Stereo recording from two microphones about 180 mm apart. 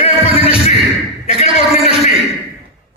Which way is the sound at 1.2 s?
35° left (ahead or behind).